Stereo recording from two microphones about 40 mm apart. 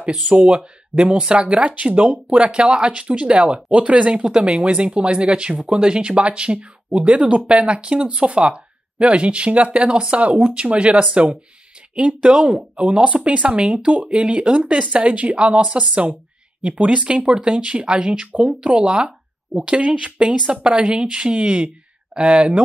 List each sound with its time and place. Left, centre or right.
0.3 s speech: right
10.1 s speech: right
13.6 s speech: centre
13.8 s speech: right